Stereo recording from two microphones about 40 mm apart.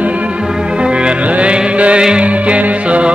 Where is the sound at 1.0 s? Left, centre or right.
Right.